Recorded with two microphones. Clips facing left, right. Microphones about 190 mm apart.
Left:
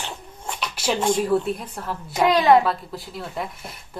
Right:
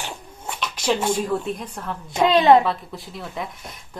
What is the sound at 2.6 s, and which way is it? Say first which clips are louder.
A woman's voice: even; centre (ahead or behind).